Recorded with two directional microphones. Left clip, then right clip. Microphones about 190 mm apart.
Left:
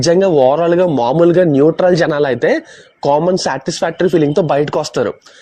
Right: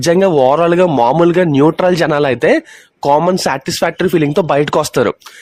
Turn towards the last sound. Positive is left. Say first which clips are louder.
# right 3 dB
turn(degrees=-20)  # may be behind; listen again after turning